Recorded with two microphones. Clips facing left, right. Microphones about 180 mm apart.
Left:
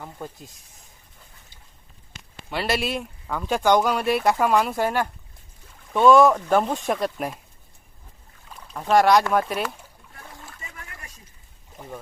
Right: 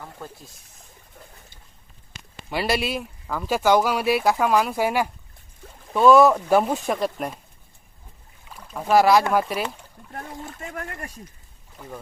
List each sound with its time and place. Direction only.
0.0 s speech: 15° left (ahead or behind)
2.5 s speech: 5° right (ahead or behind)
8.4 s speech: 5° right (ahead or behind)
10.7 s a sound: 60° right (ahead or behind)